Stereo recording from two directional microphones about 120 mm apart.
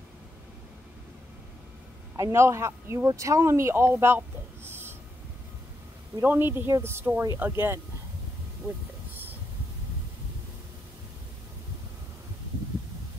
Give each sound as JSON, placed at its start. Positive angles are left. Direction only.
{"t": 2.1, "sound": "speech", "side_deg": -25}
{"t": 6.2, "sound": "speech", "side_deg": -15}
{"t": 9.1, "sound": "a sound", "side_deg": -15}